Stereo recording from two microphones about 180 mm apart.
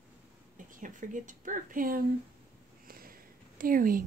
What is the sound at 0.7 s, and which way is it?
Speech, 50° right (ahead or behind).